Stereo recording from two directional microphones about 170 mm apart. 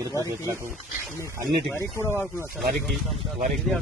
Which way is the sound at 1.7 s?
15° left (ahead or behind).